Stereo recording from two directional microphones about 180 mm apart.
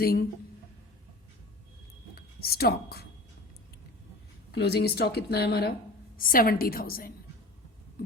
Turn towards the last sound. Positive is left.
turn(degrees=55)  # may be behind; listen again after turning